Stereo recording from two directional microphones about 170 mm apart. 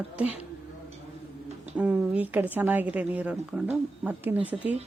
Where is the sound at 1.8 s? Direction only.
10° right (ahead or behind).